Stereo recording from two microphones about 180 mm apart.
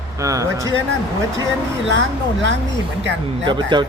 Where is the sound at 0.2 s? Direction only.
20° right (ahead or behind).